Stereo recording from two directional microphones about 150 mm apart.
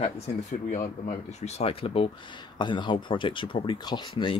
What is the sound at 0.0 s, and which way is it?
Speech, 50° left (ahead or behind).